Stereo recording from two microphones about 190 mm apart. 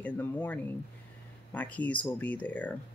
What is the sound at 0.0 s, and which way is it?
Speech, 10° left (ahead or behind).